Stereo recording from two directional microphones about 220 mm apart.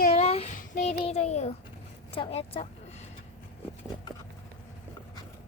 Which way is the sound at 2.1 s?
25° left (ahead or behind).